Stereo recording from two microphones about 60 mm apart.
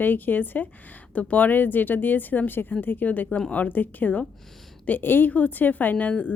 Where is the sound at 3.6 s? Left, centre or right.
Left.